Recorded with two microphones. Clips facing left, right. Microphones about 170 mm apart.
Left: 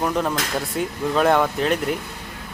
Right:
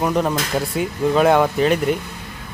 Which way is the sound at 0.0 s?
5° right (ahead or behind).